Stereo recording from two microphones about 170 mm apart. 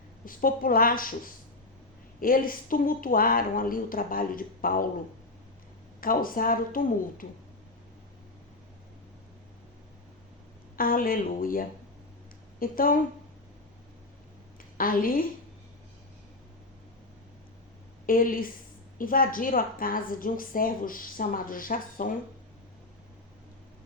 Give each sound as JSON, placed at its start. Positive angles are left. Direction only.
{"t": 0.3, "sound": "a woman's voice", "side_deg": 55}
{"t": 6.0, "sound": "a woman's voice", "side_deg": 55}
{"t": 10.8, "sound": "a woman's voice", "side_deg": 55}
{"t": 14.8, "sound": "a woman's voice", "side_deg": 55}
{"t": 18.0, "sound": "a woman's voice", "side_deg": 55}